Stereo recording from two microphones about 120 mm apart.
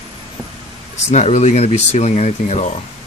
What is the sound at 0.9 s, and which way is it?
Speech, 75° left (ahead or behind).